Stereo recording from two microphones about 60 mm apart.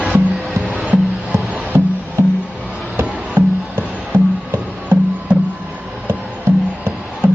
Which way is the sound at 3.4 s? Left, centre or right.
Right.